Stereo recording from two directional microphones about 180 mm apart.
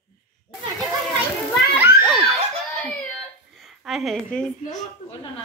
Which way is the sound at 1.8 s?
15° right (ahead or behind).